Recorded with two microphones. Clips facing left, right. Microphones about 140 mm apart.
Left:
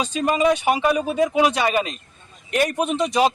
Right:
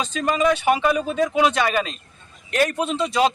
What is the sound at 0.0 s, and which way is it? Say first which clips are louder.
A man's voice: left 1 dB; 10° left (ahead or behind).